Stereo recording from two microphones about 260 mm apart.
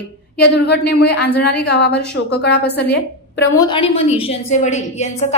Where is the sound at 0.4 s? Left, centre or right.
Left.